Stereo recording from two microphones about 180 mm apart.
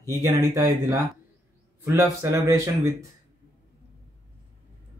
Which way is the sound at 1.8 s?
15° right (ahead or behind).